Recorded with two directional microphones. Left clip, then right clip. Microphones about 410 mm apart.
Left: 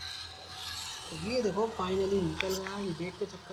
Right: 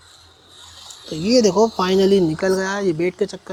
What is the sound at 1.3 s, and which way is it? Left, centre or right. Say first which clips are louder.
Speech: right 16 dB; right.